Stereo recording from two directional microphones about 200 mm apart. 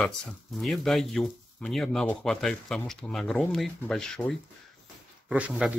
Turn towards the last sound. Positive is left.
turn(degrees=-5)  # may be behind; listen again after turning